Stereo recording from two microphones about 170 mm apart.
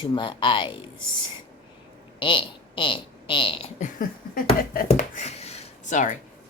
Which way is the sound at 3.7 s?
50° left (ahead or behind).